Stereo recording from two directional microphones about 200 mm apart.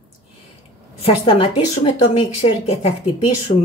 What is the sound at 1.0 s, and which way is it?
A woman's voice, 30° left (ahead or behind).